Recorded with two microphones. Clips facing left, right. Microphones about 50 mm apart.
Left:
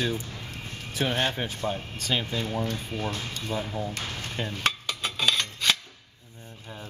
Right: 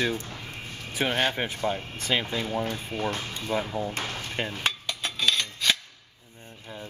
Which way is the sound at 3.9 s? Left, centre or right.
Right.